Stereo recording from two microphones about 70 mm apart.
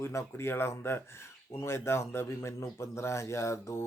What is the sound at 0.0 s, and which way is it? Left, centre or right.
Speech, left.